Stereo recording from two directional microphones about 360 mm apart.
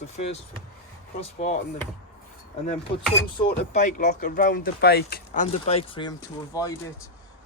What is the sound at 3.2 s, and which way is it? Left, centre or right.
Speech, centre.